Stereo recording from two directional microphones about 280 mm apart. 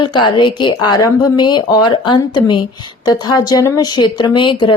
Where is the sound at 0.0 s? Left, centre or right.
Centre.